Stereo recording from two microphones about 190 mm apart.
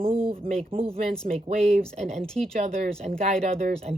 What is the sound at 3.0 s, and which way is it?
Speech, 40° right (ahead or behind).